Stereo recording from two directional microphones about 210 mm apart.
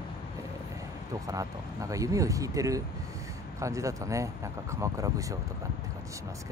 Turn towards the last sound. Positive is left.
turn(degrees=-15)  # may be behind; listen again after turning